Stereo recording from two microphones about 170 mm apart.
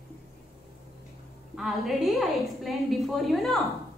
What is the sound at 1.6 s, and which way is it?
A woman's voice, centre (ahead or behind).